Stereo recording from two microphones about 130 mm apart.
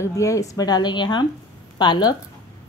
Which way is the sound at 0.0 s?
25° left (ahead or behind).